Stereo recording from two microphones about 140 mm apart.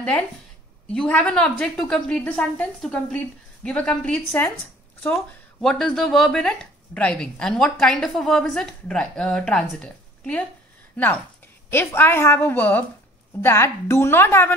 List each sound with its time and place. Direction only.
0.9 s a woman's voice: 10° left (ahead or behind)
11.7 s a woman's voice: 15° left (ahead or behind)